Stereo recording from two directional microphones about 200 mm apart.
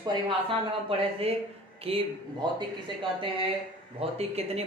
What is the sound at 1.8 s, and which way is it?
Speech, 30° right (ahead or behind).